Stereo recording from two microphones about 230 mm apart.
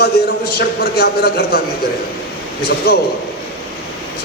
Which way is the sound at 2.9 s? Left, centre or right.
Left.